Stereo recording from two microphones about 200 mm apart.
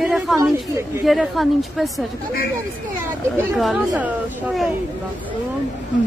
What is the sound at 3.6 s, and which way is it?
A woman's voice, 5° right (ahead or behind).